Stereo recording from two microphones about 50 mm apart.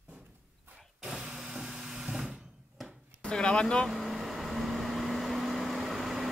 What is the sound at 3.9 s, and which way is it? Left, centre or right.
Vehicle, centre.